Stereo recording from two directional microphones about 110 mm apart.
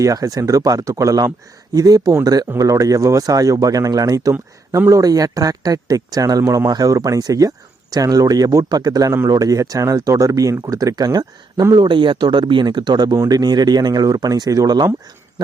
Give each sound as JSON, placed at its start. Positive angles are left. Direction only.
{"t": 0.0, "sound": "speech", "side_deg": -35}